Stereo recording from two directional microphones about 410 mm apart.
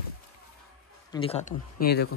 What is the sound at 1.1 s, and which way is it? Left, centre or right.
Speech, centre.